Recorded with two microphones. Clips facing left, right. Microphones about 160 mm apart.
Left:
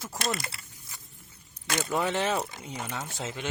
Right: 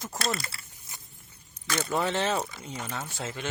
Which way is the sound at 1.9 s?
10° left (ahead or behind).